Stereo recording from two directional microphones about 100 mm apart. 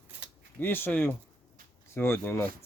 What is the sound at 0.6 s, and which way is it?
Speech, 20° left (ahead or behind).